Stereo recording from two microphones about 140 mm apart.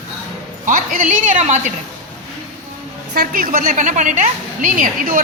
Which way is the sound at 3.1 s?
90° right.